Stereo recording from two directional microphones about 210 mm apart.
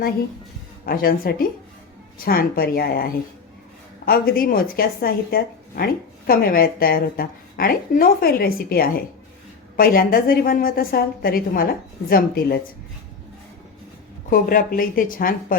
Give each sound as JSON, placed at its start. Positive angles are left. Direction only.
{"t": 0.9, "sound": "a woman's voice", "side_deg": 45}
{"t": 14.3, "sound": "a woman's voice", "side_deg": 40}